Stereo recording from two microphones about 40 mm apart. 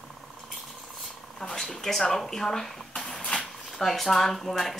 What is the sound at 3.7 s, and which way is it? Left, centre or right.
Speech, centre.